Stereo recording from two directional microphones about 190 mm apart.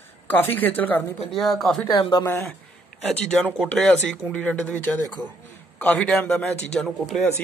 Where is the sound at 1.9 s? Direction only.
25° left (ahead or behind).